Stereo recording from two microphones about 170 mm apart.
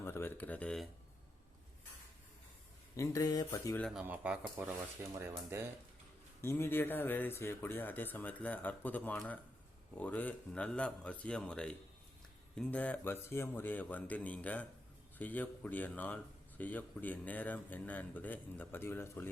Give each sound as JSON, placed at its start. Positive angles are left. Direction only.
{"t": 0.0, "sound": "a sound", "side_deg": 15}
{"t": 2.9, "sound": "speech", "side_deg": 20}
{"t": 3.8, "sound": "speech", "side_deg": 0}
{"t": 4.0, "sound": "speech", "side_deg": -10}
{"t": 6.4, "sound": "speech", "side_deg": 15}